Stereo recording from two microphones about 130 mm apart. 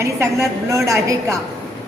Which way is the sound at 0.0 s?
20° right (ahead or behind).